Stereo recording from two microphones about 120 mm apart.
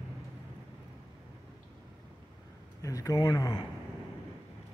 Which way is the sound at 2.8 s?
30° left (ahead or behind).